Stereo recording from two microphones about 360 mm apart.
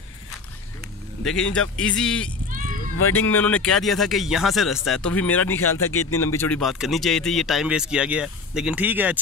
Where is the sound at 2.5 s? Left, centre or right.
Right.